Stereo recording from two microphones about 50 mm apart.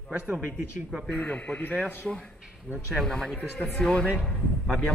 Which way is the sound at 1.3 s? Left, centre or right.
Left.